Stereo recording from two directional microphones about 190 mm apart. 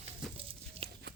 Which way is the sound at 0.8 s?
30° right (ahead or behind).